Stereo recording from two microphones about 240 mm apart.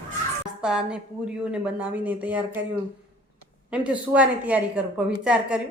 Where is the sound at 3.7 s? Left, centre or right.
Centre.